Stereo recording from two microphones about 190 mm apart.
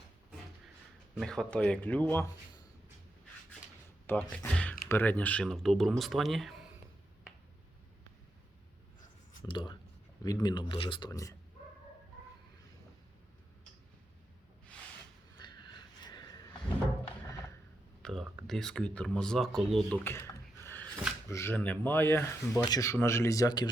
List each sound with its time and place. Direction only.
1.1 s speech: centre (ahead or behind)
4.1 s speech: 10° left (ahead or behind)
9.4 s speech: 25° left (ahead or behind)
15.4 s a sound: 25° left (ahead or behind)
18.0 s speech: centre (ahead or behind)
20.1 s a sound: 15° left (ahead or behind)
21.2 s speech: 15° left (ahead or behind)